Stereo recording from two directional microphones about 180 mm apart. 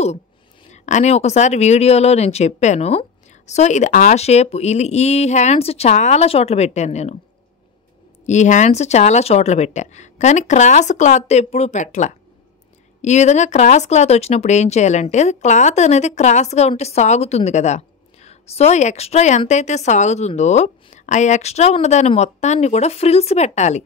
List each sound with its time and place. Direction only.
0.7 s speech: 40° left (ahead or behind)
8.3 s speech: 40° left (ahead or behind)